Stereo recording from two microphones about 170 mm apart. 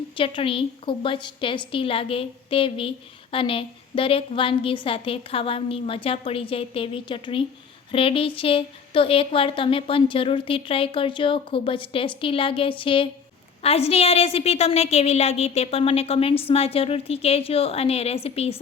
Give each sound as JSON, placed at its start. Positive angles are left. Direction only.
{"t": 0.2, "sound": "a woman's voice", "side_deg": 30}